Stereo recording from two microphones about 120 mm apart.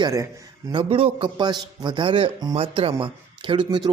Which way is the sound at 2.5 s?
50° right (ahead or behind).